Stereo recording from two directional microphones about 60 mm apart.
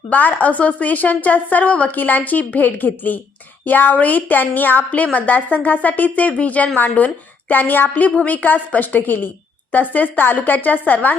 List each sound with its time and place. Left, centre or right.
0.1 s a woman's voice: left